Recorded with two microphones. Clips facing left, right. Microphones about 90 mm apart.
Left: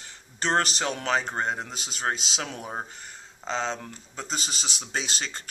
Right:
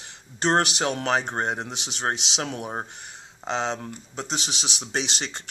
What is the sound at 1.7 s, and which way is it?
Speech, 70° right (ahead or behind).